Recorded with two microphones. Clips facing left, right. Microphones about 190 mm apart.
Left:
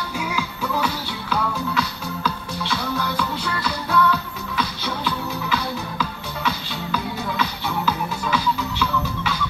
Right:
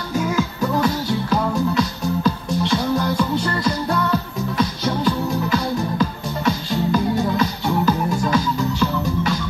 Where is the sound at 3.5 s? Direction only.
40° right (ahead or behind).